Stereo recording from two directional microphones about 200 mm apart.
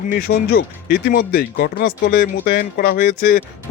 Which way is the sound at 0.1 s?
50° left (ahead or behind).